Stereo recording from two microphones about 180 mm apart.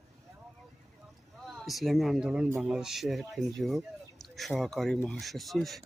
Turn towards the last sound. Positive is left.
turn(degrees=0)  # may be behind; listen again after turning